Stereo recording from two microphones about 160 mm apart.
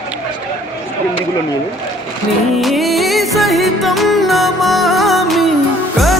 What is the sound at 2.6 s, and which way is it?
Music, centre (ahead or behind).